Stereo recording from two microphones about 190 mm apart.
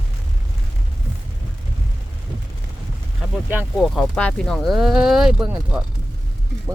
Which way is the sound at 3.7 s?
Centre (ahead or behind).